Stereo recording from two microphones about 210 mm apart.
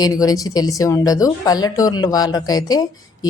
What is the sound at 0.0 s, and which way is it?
A woman's voice, 15° left (ahead or behind).